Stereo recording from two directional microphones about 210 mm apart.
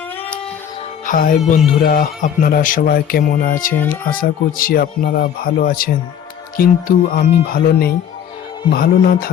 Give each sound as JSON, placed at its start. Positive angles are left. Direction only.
{"t": 1.0, "sound": "music", "side_deg": 40}
{"t": 1.5, "sound": "speech", "side_deg": 45}